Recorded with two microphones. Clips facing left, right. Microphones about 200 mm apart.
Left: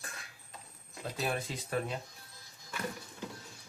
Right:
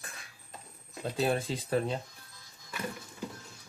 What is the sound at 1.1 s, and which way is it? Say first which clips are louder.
Speech: right 6 dB; 30° right (ahead or behind).